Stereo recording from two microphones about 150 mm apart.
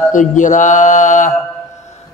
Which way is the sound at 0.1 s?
55° left (ahead or behind).